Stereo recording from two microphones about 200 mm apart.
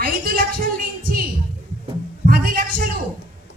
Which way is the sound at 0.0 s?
45° right (ahead or behind).